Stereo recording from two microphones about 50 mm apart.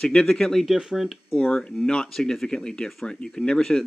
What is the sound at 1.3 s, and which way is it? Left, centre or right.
Speech, centre.